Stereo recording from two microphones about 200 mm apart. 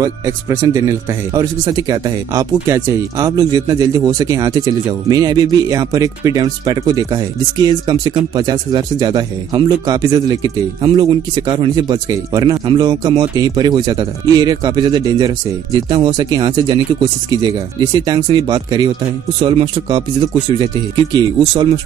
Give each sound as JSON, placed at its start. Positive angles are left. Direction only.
{"t": 0.0, "sound": "speech", "side_deg": -15}